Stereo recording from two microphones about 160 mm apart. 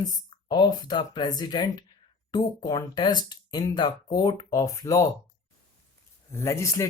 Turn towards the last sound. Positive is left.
turn(degrees=20)  # may be behind; listen again after turning